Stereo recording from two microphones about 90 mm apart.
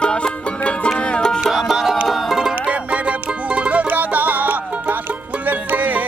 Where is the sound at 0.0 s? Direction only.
10° left (ahead or behind).